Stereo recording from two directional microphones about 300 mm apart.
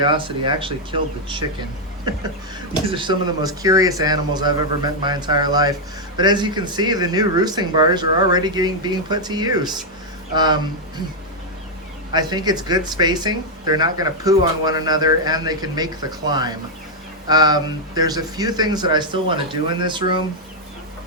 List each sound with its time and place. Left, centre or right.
0.0 s speech: centre
2.9 s speech: centre
12.1 s speech: centre